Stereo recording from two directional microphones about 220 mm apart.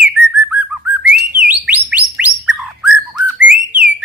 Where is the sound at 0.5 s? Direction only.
5° right (ahead or behind).